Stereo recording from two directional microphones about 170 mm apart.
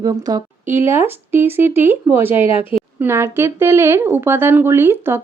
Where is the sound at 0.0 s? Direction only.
20° right (ahead or behind).